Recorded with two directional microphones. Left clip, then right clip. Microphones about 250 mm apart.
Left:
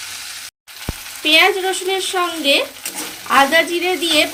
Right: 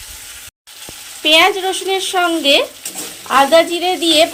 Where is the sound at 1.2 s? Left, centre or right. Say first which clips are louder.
Right 2 dB; centre.